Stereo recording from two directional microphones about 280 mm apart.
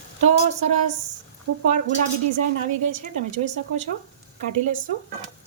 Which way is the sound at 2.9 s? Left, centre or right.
Right.